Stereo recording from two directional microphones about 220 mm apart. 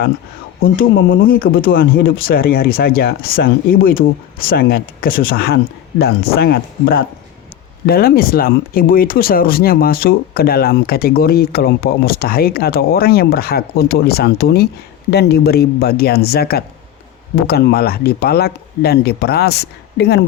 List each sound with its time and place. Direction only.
1.2 s speech: 40° left (ahead or behind)